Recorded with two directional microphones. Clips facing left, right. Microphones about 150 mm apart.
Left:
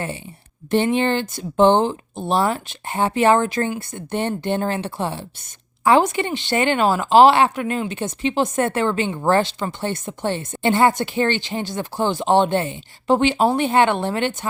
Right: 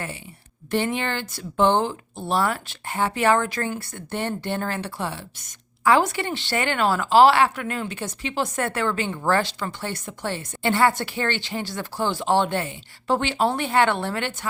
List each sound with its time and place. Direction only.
0.7 s speech: 25° left (ahead or behind)